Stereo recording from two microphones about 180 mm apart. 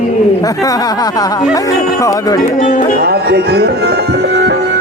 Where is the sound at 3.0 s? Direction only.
65° right (ahead or behind).